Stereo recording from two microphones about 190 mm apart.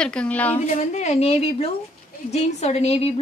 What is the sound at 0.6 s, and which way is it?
A woman's voice, 40° left (ahead or behind).